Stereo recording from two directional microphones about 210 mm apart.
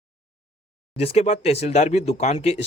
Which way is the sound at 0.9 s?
30° left (ahead or behind).